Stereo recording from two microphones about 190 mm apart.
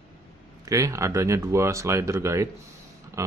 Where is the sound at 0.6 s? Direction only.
15° right (ahead or behind).